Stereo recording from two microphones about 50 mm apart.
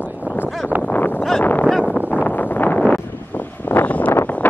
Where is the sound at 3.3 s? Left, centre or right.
Left.